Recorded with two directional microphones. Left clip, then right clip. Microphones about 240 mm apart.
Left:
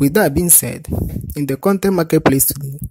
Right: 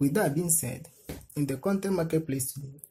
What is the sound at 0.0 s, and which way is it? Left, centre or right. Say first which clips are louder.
Speech: left 12 dB; left.